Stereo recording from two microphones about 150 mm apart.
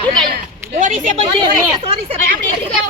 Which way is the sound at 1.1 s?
35° right (ahead or behind).